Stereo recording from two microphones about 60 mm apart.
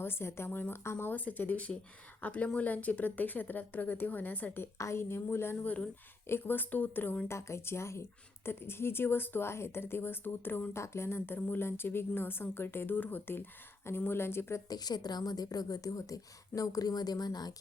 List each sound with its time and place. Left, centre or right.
0.0 s a woman's voice: left
4.8 s a woman's voice: left
5.6 s a woman's voice: left
6.2 s speech: left
7.3 s a woman's voice: left
10.8 s a woman's voice: left
11.3 s a woman's voice: left
11.6 s speech: left
14.7 s a woman's voice: left